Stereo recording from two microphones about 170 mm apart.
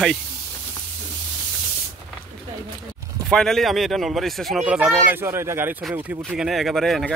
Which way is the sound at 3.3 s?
Centre (ahead or behind).